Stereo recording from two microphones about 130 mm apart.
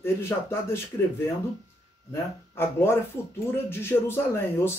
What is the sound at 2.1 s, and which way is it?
Speech, 20° left (ahead or behind).